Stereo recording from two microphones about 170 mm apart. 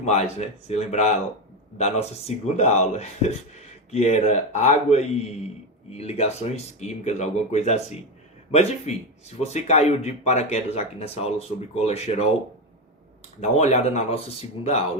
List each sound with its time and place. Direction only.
0.0 s speech: 40° left (ahead or behind)
13.4 s speech: 40° left (ahead or behind)